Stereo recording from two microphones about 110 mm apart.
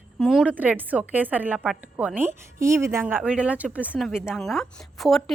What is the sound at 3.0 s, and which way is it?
Speech, 10° right (ahead or behind).